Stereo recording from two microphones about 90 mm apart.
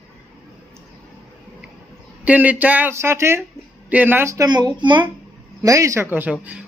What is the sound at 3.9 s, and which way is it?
Speech, 20° right (ahead or behind).